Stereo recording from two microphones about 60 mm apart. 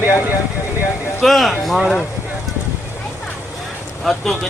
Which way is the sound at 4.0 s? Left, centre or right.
Centre.